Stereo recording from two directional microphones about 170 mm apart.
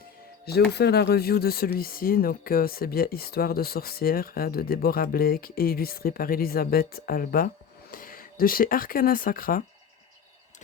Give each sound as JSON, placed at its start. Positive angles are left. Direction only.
{"t": 0.4, "sound": "speech", "side_deg": 75}